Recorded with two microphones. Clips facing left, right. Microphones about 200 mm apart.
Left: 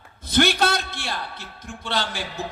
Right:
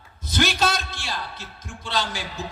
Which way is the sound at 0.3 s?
60° left (ahead or behind).